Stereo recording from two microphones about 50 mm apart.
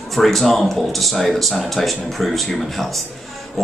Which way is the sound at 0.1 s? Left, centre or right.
Centre.